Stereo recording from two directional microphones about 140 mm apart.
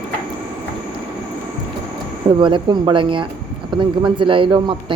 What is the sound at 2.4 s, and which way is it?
Speech, 35° right (ahead or behind).